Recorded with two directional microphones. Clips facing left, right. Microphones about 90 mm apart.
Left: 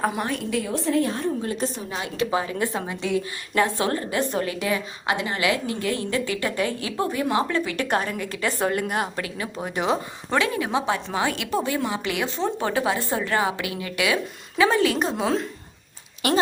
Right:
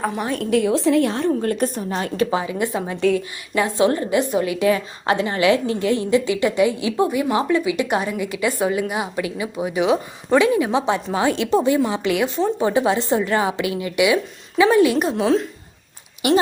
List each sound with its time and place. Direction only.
0.5 s a woman's voice: 80° right; by 2.2 s 40° right (ahead or behind)
2.3 s a woman's voice: 15° right (ahead or behind)
4.7 s a woman's voice: 30° right (ahead or behind); by 10.3 s 5° right (ahead or behind)
10.3 s a woman's voice: 20° right (ahead or behind)
15.1 s a woman's voice: 5° left (ahead or behind)